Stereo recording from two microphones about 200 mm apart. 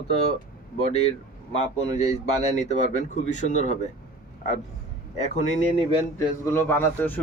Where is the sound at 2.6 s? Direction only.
35° left (ahead or behind).